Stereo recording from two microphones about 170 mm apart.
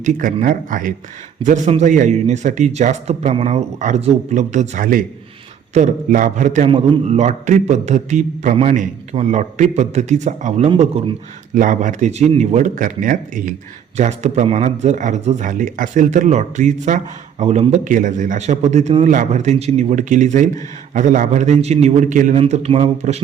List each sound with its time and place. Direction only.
0.0 s speech: 50° right (ahead or behind)
6.7 s speech: 30° right (ahead or behind)
11.5 s speech: 50° right (ahead or behind)